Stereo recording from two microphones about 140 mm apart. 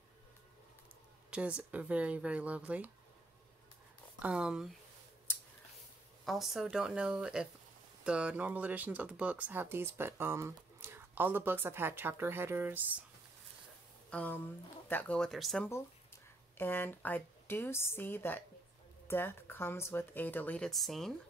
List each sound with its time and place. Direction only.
1.3 s speech: 10° right (ahead or behind)
4.2 s speech: 10° right (ahead or behind)
6.2 s speech: centre (ahead or behind)
14.1 s speech: 10° left (ahead or behind)
16.5 s speech: 15° left (ahead or behind)